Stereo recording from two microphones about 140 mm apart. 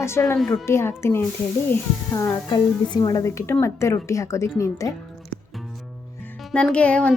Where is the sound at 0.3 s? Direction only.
5° left (ahead or behind).